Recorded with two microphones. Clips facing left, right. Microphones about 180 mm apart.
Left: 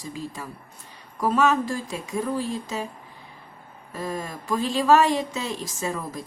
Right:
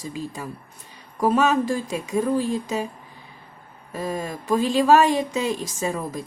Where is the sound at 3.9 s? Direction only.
15° right (ahead or behind).